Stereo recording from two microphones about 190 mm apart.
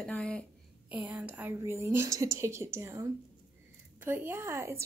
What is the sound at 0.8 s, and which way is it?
Speech, 10° right (ahead or behind).